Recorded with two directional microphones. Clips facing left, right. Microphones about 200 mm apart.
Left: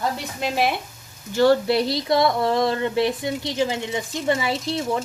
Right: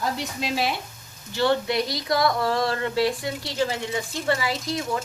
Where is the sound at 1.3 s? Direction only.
40° left (ahead or behind).